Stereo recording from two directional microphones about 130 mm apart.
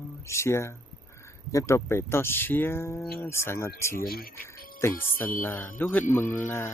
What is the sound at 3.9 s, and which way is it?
Speech, 90° left.